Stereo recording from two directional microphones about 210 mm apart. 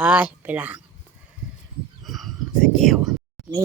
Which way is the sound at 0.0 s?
5° right (ahead or behind).